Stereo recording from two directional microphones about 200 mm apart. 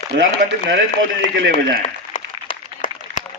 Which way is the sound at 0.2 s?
60° right (ahead or behind).